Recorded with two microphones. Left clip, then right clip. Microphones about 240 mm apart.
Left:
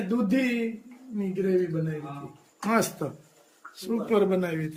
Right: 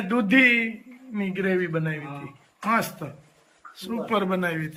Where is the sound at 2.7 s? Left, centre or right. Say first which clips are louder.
Right 1 dB; centre.